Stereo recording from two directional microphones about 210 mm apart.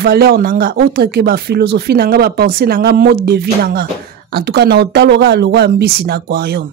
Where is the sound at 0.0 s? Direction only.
50° right (ahead or behind).